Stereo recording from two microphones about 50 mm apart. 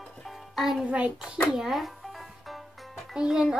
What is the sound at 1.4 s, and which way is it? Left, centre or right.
Speech, centre.